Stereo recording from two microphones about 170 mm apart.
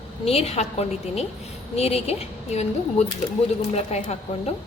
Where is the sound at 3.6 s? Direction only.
40° left (ahead or behind).